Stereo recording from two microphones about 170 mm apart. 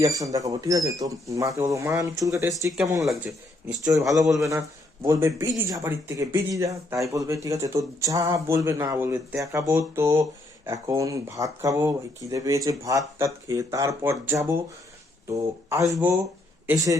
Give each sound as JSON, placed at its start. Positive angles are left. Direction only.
{"t": 0.0, "sound": "speech", "side_deg": -20}
{"t": 3.2, "sound": "speech", "side_deg": -5}
{"t": 4.1, "sound": "speech", "side_deg": -20}